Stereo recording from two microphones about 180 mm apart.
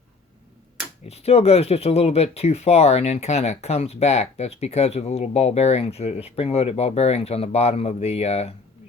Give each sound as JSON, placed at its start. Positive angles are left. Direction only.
{"t": 1.0, "sound": "speech", "side_deg": 35}